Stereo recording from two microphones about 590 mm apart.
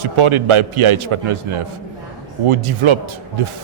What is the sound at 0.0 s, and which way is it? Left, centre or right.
A man's voice, right.